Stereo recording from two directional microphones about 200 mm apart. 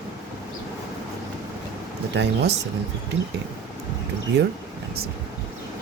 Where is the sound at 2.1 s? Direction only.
60° right (ahead or behind).